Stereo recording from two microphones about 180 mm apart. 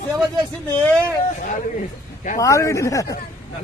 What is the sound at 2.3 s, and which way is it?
Speech, 15° left (ahead or behind).